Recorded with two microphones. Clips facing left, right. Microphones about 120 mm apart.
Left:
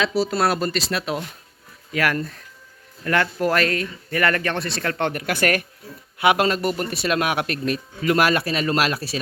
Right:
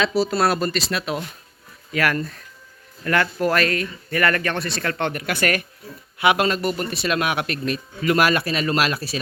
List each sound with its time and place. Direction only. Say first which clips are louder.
0.0 s speech: right 1 dB; 5° left (ahead or behind)
0.7 s a man's voice: even; 35° left (ahead or behind)
1.9 s a man's voice: even; 15° left (ahead or behind); by 7.8 s 45° left (ahead or behind)
8.0 s a man's voice: even; 30° left (ahead or behind)